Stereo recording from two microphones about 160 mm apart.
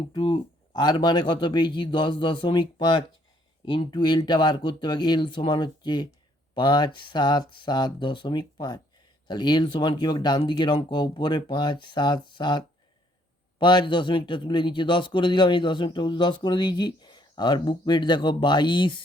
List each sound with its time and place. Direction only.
0.1 s a man's voice: 35° left (ahead or behind)